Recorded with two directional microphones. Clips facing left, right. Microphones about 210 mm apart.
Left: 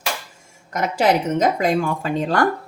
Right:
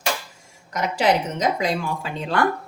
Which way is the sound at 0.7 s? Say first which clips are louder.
Left 2 dB; 50° left (ahead or behind).